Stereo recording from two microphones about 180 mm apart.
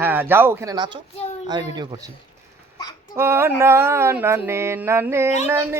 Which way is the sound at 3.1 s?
15° right (ahead or behind).